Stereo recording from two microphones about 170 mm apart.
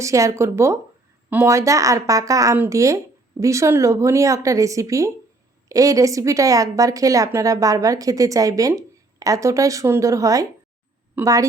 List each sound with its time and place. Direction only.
0.0 s a woman's voice: 20° right (ahead or behind)